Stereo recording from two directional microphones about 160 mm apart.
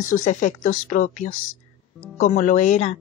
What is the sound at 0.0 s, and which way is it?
Speech, 55° left (ahead or behind).